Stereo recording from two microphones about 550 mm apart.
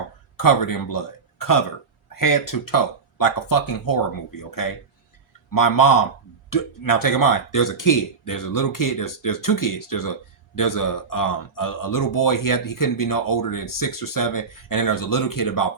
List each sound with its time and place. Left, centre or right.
0.3 s speech: left